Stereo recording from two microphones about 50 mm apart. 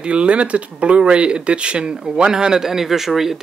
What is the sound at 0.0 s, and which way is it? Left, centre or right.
Speech, right.